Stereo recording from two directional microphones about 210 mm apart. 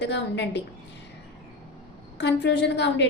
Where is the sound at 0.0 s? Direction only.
55° left (ahead or behind).